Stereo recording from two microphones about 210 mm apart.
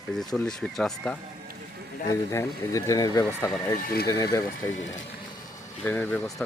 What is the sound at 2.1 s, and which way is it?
Speech, 15° left (ahead or behind).